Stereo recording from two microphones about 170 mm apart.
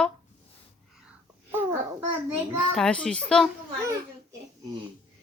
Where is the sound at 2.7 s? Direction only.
5° left (ahead or behind).